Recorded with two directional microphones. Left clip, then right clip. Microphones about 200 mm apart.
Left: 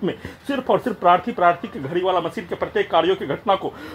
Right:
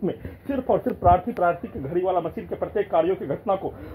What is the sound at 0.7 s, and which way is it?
Speech, 25° left (ahead or behind).